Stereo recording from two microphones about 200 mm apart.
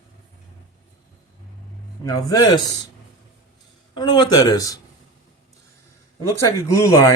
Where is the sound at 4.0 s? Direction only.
20° left (ahead or behind).